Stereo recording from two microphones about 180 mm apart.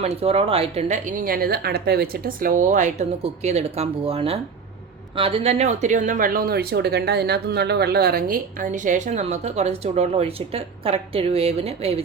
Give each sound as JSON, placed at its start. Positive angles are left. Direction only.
{"t": 0.0, "sound": "speech", "side_deg": -35}